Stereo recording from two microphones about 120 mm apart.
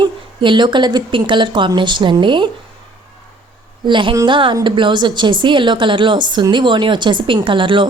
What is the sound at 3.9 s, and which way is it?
A woman's voice, 40° right (ahead or behind).